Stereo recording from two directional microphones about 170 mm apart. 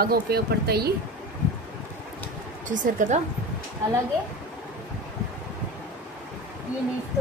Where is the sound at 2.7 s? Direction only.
50° right (ahead or behind).